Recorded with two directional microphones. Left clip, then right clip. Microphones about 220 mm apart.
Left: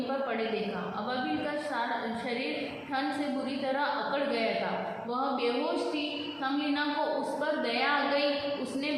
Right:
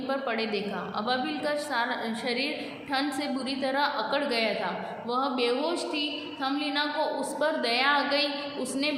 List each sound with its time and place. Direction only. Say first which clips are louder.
3.6 s a woman's voice: right 4 dB; 50° right (ahead or behind)
7.6 s a woman's voice: right 4 dB; 50° right (ahead or behind)